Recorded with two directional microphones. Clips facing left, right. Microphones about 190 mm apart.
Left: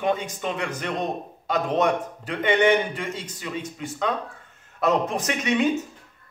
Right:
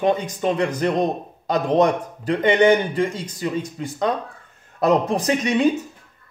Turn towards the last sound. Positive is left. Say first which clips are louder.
# right 5 dB
turn(degrees=-35)  # may be behind; listen again after turning